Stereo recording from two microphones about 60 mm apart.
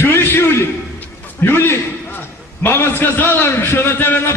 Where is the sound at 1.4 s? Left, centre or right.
Left.